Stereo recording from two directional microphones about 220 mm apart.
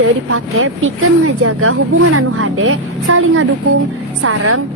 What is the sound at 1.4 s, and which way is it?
Music, 75° right (ahead or behind).